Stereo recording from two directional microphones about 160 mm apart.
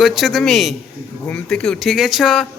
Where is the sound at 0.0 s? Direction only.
Centre (ahead or behind).